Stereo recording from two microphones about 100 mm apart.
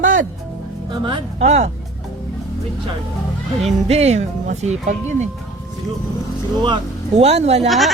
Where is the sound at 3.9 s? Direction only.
90° right.